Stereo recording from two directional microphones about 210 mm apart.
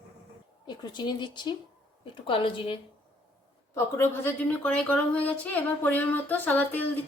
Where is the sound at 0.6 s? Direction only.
20° left (ahead or behind).